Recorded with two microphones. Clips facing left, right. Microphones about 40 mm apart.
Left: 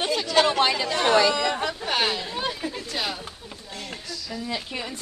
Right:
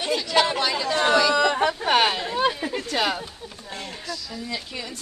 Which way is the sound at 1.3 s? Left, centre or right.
Right.